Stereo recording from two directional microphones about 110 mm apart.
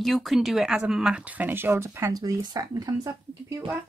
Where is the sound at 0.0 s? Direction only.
Centre (ahead or behind); by 3.5 s 35° right (ahead or behind).